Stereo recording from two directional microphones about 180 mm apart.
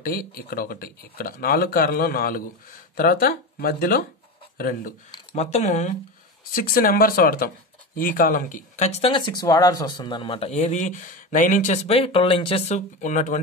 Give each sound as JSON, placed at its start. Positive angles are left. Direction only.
{"t": 0.0, "sound": "speech", "side_deg": 55}
{"t": 5.3, "sound": "speech", "side_deg": 40}
{"t": 6.5, "sound": "speech", "side_deg": 55}